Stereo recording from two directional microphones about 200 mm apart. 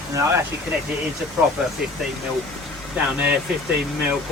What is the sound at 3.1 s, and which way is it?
Speech, 5° right (ahead or behind).